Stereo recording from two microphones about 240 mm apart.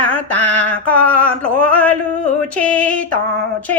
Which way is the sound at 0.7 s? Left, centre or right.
Centre.